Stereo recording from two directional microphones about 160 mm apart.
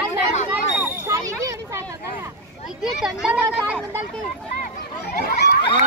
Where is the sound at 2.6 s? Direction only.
5° right (ahead or behind).